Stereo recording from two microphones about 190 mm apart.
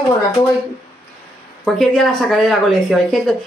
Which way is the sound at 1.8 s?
Centre (ahead or behind).